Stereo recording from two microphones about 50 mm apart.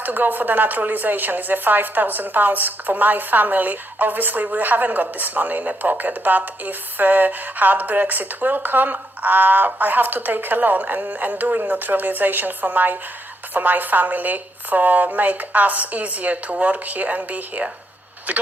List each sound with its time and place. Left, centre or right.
0.0 s a woman's voice: right